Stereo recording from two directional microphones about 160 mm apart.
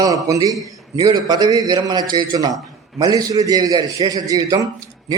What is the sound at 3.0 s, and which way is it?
A man's voice, 25° right (ahead or behind).